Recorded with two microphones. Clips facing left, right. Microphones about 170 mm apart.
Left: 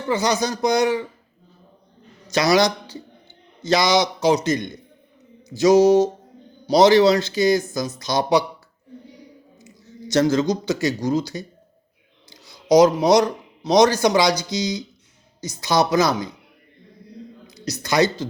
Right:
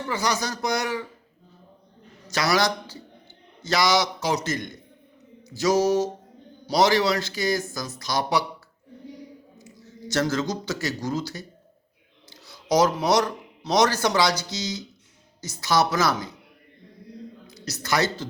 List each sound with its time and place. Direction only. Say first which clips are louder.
0.1 s speech: left 7 dB; 20° left (ahead or behind)
2.3 s speech: left 6 dB; 20° left (ahead or behind)
9.6 s a woman's voice: left 6 dB; 20° left (ahead or behind)
17.4 s speech: left 5 dB; 15° left (ahead or behind)